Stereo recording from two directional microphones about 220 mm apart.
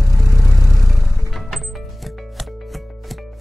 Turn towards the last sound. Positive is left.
turn(degrees=0)  # may be behind; listen again after turning